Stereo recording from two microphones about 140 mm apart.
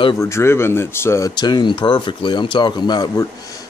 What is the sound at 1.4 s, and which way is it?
Speech, 30° left (ahead or behind).